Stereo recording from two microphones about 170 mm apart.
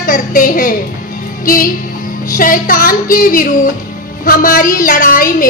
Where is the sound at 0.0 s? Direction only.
55° left (ahead or behind).